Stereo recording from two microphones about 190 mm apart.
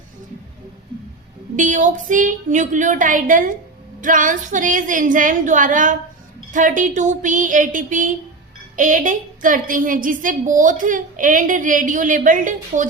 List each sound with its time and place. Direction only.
1.5 s a woman's voice: 40° right (ahead or behind)